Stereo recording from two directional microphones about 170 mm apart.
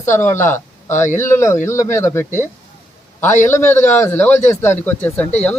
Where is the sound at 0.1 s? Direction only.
15° left (ahead or behind).